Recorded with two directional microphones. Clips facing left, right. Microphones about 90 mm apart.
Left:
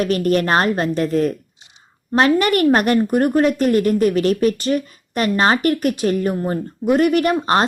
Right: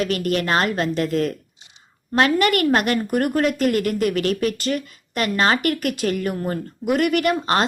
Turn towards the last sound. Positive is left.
turn(degrees=30)  # may be behind; listen again after turning